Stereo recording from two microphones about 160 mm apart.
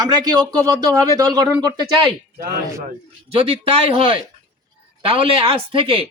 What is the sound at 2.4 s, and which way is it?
Speech, 70° right (ahead or behind).